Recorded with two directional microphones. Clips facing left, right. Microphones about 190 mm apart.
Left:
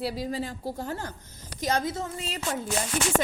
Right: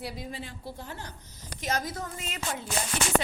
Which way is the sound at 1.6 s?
30° left (ahead or behind).